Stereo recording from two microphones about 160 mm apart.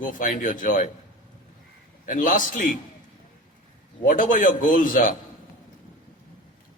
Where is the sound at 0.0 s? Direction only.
55° left (ahead or behind).